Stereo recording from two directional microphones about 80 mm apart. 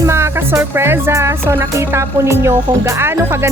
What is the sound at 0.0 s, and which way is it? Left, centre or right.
Music, right.